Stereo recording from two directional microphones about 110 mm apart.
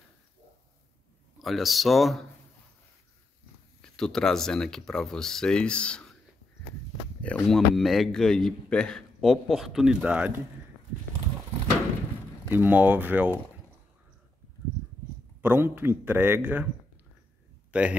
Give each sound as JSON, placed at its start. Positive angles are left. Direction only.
{"t": 1.4, "sound": "a man's voice", "side_deg": 0}
{"t": 3.8, "sound": "a man's voice", "side_deg": 5}
{"t": 7.2, "sound": "a man's voice", "side_deg": 10}
{"t": 12.4, "sound": "speech", "side_deg": -15}
{"t": 15.4, "sound": "speech", "side_deg": -20}
{"t": 17.6, "sound": "a sound", "side_deg": -10}